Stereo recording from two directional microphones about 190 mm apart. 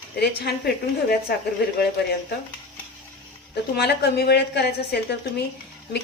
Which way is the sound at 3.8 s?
60° left (ahead or behind).